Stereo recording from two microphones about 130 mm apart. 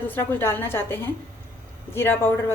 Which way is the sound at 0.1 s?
15° left (ahead or behind).